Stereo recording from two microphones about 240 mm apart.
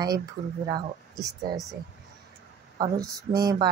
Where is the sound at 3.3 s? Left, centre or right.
Centre.